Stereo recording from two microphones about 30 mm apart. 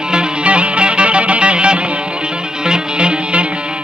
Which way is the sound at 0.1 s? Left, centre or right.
Right.